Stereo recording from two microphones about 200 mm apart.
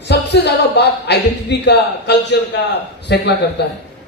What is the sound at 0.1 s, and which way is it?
Speech, 55° left (ahead or behind).